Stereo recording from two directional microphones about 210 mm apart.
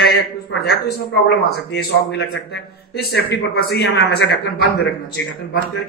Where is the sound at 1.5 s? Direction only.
50° left (ahead or behind).